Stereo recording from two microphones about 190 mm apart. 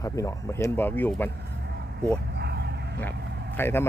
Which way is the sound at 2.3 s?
60° right (ahead or behind).